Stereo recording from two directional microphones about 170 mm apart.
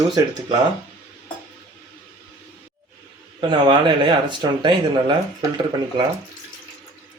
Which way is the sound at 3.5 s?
30° right (ahead or behind).